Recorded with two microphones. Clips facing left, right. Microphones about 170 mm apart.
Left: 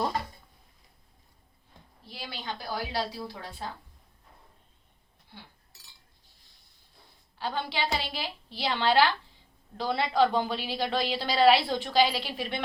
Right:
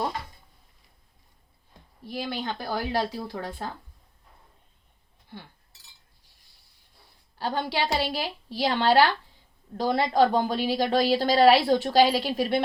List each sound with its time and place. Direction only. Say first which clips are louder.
2.0 s a woman's voice: right 7 dB; 50° right (ahead or behind)
7.3 s a woman's voice: right 4 dB; 45° right (ahead or behind)